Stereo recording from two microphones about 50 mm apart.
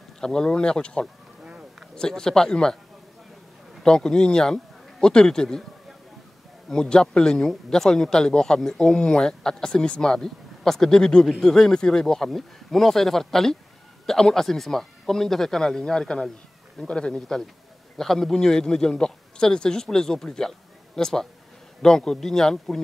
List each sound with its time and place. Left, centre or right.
0.2 s speech: centre
3.8 s speech: centre
6.7 s speech: centre
17.9 s speech: centre